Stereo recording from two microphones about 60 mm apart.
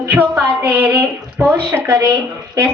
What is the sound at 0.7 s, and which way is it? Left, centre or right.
Speech, right.